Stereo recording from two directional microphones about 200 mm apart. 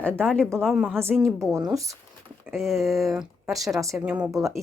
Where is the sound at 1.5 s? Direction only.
15° right (ahead or behind).